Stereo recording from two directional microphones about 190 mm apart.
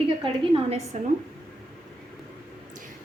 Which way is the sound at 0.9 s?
40° right (ahead or behind).